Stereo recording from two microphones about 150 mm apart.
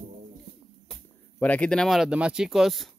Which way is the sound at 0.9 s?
10° left (ahead or behind).